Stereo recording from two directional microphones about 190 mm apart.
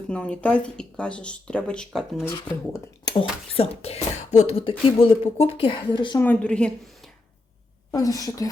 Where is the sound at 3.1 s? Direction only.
30° left (ahead or behind).